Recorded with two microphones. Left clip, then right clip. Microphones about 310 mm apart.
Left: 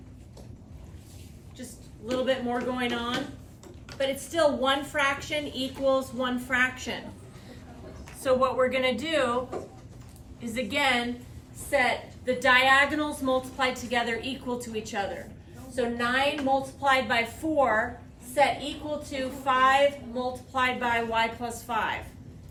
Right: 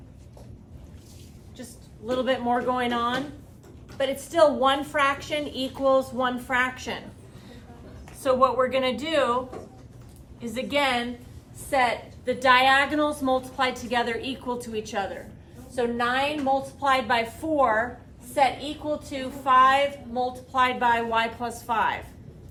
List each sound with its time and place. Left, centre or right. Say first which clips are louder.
2.0 s a woman's voice: right 3 dB; centre
8.2 s a woman's voice: right 3 dB; centre
10.4 s a woman's voice: right 2 dB; centre